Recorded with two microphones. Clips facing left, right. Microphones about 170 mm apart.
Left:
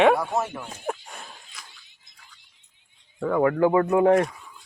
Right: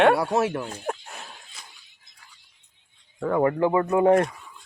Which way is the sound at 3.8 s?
Centre (ahead or behind).